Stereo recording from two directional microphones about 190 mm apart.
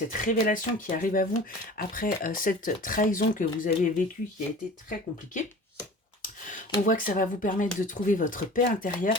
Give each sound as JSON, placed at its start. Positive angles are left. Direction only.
{"t": 0.1, "sound": "speech", "side_deg": 45}
{"t": 6.5, "sound": "speech", "side_deg": 45}